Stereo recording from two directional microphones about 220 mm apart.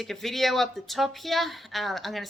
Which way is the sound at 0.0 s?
Centre (ahead or behind).